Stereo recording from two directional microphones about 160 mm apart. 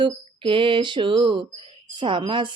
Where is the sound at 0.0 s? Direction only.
30° right (ahead or behind).